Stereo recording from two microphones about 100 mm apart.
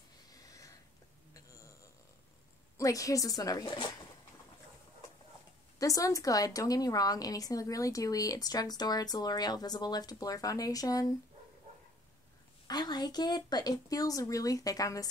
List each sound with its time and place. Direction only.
0.3 s a sound: 35° left (ahead or behind)
2.8 s a woman's voice: 35° left (ahead or behind)
5.8 s a woman's voice: 35° left (ahead or behind)
12.6 s a woman's voice: 45° left (ahead or behind)